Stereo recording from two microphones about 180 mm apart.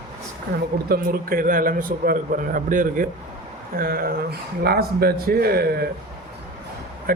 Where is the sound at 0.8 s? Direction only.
55° right (ahead or behind).